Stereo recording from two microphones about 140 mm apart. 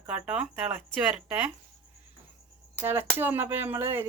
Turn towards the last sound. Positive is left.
turn(degrees=-15)  # may be behind; listen again after turning